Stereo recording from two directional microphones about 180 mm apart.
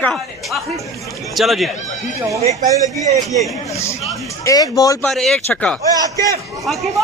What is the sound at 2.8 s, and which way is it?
Speech, 40° right (ahead or behind).